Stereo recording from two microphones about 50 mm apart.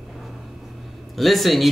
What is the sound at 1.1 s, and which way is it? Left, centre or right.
Speech, centre.